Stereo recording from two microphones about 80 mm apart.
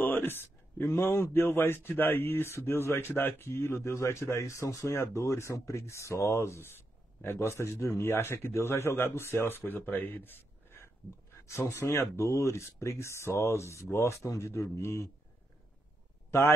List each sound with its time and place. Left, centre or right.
0.0 s speech: left
16.3 s speech: left